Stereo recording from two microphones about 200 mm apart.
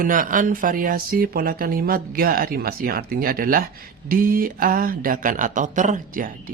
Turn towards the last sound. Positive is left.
turn(degrees=-40)  # may be behind; listen again after turning